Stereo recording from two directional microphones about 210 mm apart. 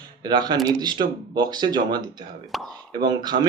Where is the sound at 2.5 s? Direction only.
Centre (ahead or behind).